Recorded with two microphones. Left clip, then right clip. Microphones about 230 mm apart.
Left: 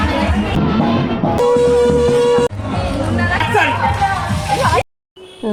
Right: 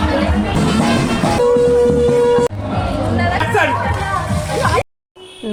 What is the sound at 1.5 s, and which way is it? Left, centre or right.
Music, left.